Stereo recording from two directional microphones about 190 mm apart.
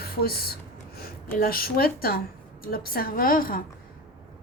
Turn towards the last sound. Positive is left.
turn(degrees=50)  # may be behind; listen again after turning